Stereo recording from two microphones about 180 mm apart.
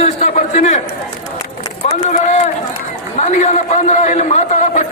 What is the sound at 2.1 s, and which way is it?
A man's voice, 40° left (ahead or behind).